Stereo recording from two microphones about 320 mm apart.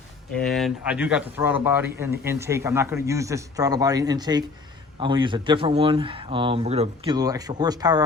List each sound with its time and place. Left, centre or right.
0.3 s speech: centre